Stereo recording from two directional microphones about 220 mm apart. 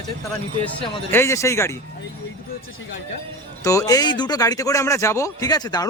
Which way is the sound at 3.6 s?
15° left (ahead or behind).